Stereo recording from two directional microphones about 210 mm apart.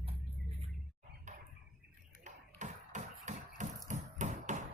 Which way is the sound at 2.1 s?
35° right (ahead or behind).